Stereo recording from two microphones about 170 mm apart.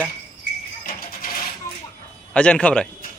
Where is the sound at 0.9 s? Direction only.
55° left (ahead or behind).